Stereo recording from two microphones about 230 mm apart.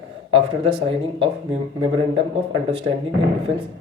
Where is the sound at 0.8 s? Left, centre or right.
Right.